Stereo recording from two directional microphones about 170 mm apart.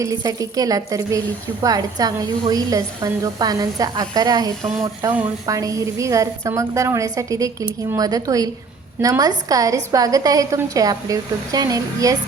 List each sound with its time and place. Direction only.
0.0 s a woman's voice: 20° right (ahead or behind)